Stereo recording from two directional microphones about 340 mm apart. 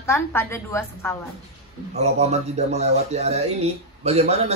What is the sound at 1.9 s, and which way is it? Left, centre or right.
Speech, centre.